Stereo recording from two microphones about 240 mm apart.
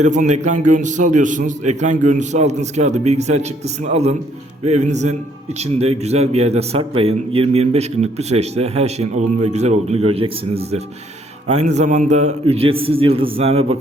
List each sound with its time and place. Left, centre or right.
0.0 s a man's voice: right